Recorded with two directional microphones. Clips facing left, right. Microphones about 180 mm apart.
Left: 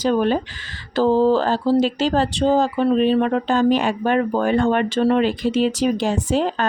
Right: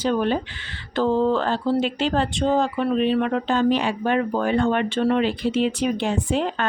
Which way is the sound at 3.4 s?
45° left (ahead or behind).